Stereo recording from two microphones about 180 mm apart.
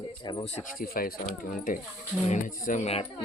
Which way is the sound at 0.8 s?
55° left (ahead or behind).